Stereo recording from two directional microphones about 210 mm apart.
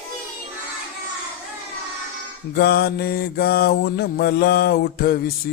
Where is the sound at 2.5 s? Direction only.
50° left (ahead or behind).